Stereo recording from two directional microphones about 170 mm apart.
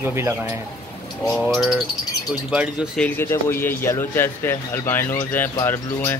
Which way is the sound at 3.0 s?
10° left (ahead or behind).